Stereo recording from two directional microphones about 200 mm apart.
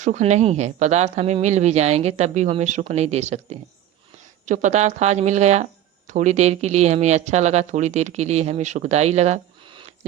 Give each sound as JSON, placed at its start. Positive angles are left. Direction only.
{"t": 0.0, "sound": "speech", "side_deg": -35}